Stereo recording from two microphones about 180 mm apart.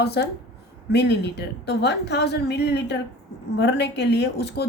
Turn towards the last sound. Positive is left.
turn(degrees=65)  # may be behind; listen again after turning